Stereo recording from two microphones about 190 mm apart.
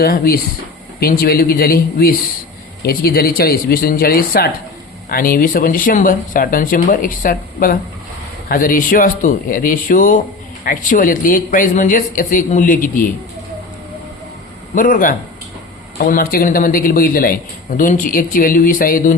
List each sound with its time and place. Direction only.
0.0 s a man's voice: 55° left (ahead or behind)
14.8 s a man's voice: 45° left (ahead or behind)